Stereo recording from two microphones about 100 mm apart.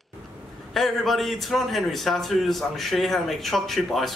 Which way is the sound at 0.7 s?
Centre (ahead or behind).